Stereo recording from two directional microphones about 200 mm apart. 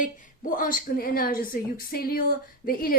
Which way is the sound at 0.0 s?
40° left (ahead or behind).